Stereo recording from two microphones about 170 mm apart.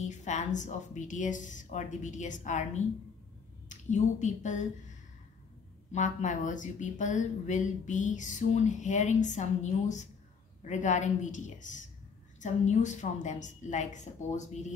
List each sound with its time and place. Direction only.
0.0 s speech: 45° left (ahead or behind)
5.9 s speech: 45° left (ahead or behind)